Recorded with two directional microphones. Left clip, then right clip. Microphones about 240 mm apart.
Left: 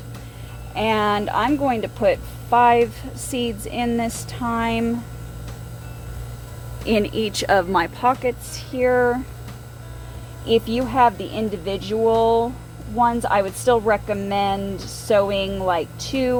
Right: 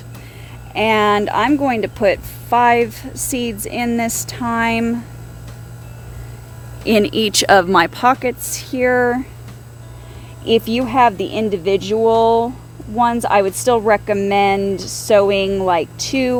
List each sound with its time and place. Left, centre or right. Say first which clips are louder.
0.7 s speech: right 6 dB; right
6.8 s speech: right 6 dB; right
10.4 s speech: right 4 dB; right